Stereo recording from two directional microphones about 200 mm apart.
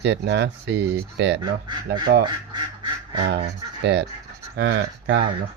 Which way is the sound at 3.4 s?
60° right (ahead or behind).